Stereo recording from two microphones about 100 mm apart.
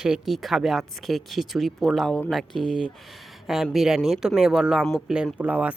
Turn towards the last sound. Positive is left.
turn(degrees=-15)  # may be behind; listen again after turning